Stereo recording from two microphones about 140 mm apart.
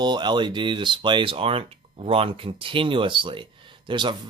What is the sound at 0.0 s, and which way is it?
Speech, 30° right (ahead or behind).